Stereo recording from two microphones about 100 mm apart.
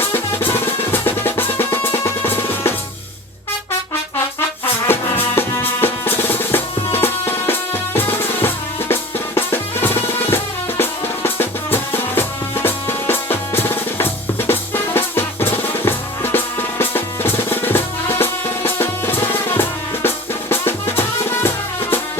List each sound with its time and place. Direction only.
0.1 s drum: 20° left (ahead or behind)
4.9 s music: 25° left (ahead or behind)
12.6 s drum: 20° left (ahead or behind)
15.8 s music: 20° left (ahead or behind)